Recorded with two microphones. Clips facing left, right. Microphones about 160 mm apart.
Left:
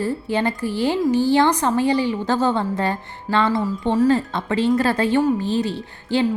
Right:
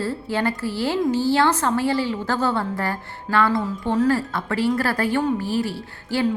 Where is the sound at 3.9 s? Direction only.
10° left (ahead or behind).